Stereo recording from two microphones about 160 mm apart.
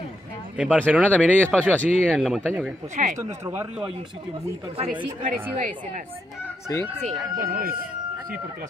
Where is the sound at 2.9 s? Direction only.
50° right (ahead or behind).